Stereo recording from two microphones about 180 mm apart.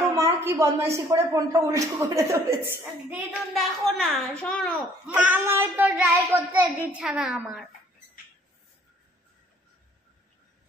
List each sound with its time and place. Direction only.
0.0 s a woman's voice: 15° right (ahead or behind)
2.8 s a woman's voice: 5° right (ahead or behind)
5.0 s a woman's voice: 5° right (ahead or behind)